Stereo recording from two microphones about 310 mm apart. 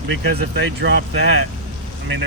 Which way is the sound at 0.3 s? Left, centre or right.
Right.